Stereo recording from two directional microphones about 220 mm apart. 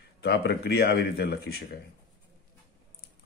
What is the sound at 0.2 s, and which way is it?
Speech, 50° left (ahead or behind).